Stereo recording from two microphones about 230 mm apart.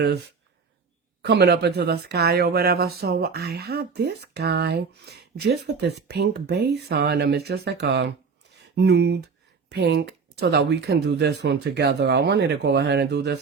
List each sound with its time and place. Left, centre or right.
1.2 s speech: right